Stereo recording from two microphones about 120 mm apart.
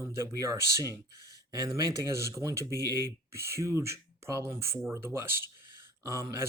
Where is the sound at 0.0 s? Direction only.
25° right (ahead or behind).